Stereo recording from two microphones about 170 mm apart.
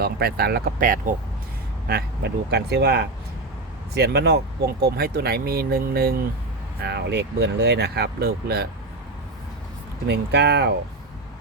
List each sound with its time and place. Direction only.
0.0 s speech: 65° right (ahead or behind)
1.9 s speech: 75° right (ahead or behind)
6.7 s speech: 75° right (ahead or behind)
10.1 s speech: 80° right